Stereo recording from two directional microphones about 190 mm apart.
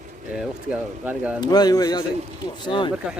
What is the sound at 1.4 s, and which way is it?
A man's voice, 20° left (ahead or behind).